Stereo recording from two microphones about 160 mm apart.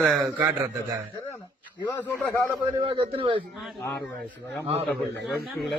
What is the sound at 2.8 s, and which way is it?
Speech, 30° right (ahead or behind).